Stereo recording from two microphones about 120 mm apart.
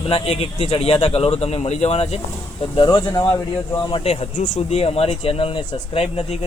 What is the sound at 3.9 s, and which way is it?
Speech, 55° left (ahead or behind).